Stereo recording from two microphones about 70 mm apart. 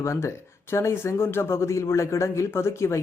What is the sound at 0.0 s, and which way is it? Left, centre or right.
Speech, left.